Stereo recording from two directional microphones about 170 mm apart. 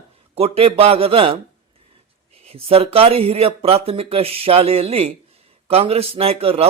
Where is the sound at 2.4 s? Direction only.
35° right (ahead or behind).